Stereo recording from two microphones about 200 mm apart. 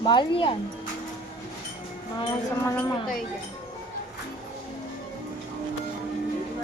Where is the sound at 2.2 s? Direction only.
15° left (ahead or behind).